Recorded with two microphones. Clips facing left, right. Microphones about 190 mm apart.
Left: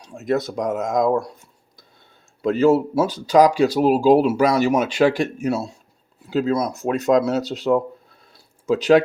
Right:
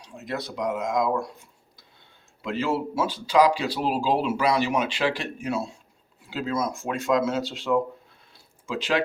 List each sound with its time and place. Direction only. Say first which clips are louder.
0.0 s speech: left 10 dB; 45° left (ahead or behind)
2.4 s speech: left 10 dB; 40° left (ahead or behind)